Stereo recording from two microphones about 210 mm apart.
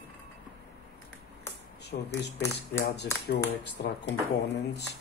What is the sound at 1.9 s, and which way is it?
Speech, 40° left (ahead or behind).